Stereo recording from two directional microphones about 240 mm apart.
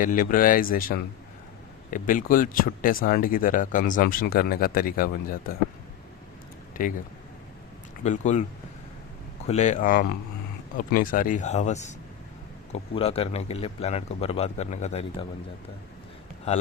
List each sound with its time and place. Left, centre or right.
0.0 s speech: left
6.8 s speech: left
8.0 s a man's voice: left
9.5 s a man's voice: left